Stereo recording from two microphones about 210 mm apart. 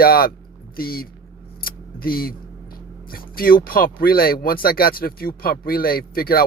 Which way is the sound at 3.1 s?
45° left (ahead or behind).